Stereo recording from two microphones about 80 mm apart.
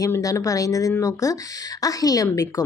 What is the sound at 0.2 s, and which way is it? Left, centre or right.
Speech, left.